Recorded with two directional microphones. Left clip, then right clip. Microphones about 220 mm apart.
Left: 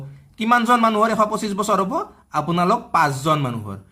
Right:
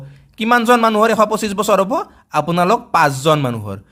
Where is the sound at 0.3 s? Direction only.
35° right (ahead or behind).